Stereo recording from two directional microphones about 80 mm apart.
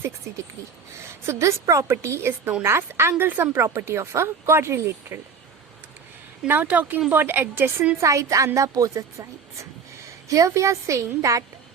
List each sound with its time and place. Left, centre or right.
1.3 s speech: right
6.5 s a woman's voice: centre
8.0 s speech: right